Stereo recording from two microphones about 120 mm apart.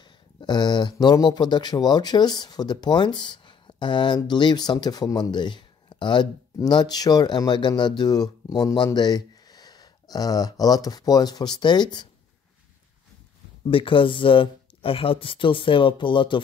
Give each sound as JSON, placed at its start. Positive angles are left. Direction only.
{"t": 0.0, "sound": "speech", "side_deg": 40}
{"t": 13.7, "sound": "speech", "side_deg": 45}